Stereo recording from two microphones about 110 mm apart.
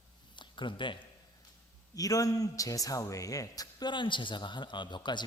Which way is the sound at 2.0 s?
30° left (ahead or behind).